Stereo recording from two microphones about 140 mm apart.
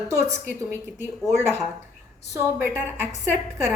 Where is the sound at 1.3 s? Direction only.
15° right (ahead or behind).